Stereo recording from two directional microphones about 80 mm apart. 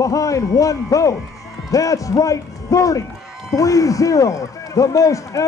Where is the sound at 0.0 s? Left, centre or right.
Left.